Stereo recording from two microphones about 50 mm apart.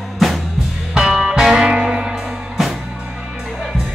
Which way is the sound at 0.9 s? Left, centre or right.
Centre.